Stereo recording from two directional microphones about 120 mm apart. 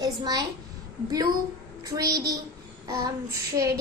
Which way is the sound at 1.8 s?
30° right (ahead or behind).